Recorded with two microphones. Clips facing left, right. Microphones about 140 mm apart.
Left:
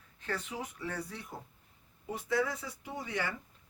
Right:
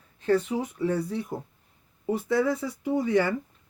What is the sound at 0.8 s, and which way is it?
Speech, 30° right (ahead or behind).